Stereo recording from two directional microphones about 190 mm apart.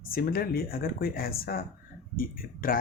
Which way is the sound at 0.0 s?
50° left (ahead or behind).